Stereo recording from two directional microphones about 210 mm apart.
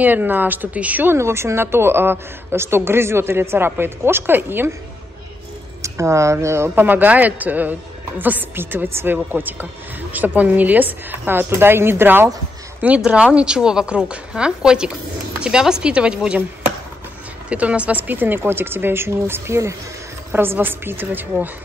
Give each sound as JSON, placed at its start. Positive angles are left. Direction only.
{"t": 0.0, "sound": "a woman's voice", "side_deg": -10}
{"t": 5.8, "sound": "a woman's voice", "side_deg": -15}
{"t": 17.5, "sound": "a woman's voice", "side_deg": -5}